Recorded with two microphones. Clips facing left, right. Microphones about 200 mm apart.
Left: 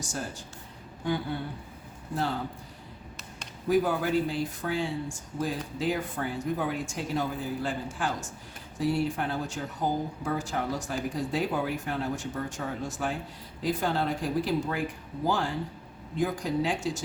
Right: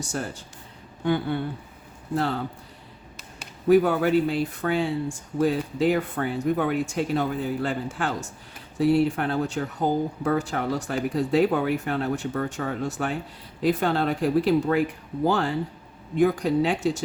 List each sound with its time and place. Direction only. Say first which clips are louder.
0.0 s speech: right 5 dB; 60° right (ahead or behind)
3.7 s speech: right 7 dB; 65° right (ahead or behind)